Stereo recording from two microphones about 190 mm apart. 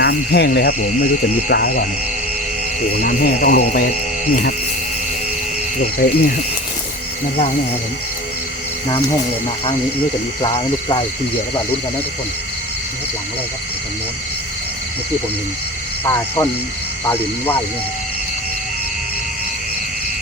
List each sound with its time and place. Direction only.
0.0 s speech: 55° left (ahead or behind)
2.9 s speech: 50° left (ahead or behind)
5.8 s speech: 45° left (ahead or behind)
10.4 s speech: 25° left (ahead or behind)
16.0 s speech: 15° left (ahead or behind)